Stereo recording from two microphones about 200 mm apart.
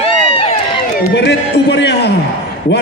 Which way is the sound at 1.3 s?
60° left (ahead or behind).